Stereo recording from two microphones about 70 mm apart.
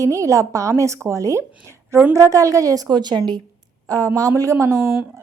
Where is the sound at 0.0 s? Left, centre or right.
Right.